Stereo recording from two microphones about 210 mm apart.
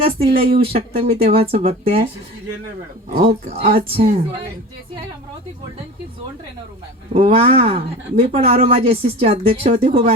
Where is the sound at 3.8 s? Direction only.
30° right (ahead or behind).